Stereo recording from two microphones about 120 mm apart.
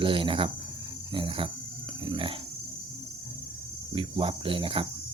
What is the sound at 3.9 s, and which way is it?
Speech, 45° right (ahead or behind).